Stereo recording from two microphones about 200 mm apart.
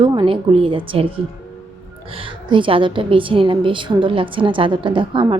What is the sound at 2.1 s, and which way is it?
A woman's voice, 25° right (ahead or behind).